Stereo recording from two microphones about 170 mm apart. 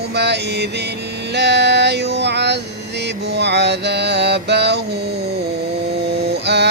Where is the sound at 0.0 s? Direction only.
80° right.